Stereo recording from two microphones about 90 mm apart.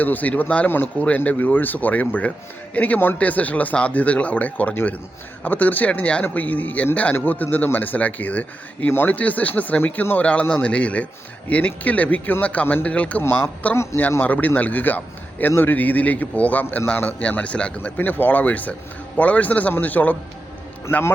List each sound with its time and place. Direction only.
0.0 s speech: 20° left (ahead or behind)
13.2 s a man's voice: 25° left (ahead or behind)